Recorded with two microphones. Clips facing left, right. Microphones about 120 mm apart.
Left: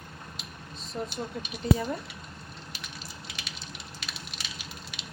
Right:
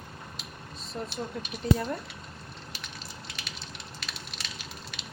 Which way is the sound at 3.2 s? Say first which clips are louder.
Even; centre (ahead or behind).